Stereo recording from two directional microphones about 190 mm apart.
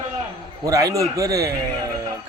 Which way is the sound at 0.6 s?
20° right (ahead or behind).